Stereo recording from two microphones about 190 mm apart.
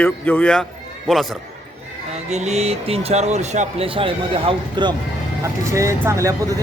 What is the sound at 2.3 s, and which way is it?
Speech, 35° right (ahead or behind).